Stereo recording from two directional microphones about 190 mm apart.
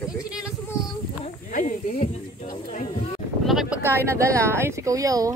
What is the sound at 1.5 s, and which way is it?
Speech, 45° left (ahead or behind).